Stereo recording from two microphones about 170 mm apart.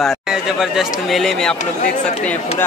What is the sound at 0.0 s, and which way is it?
Speech, centre (ahead or behind).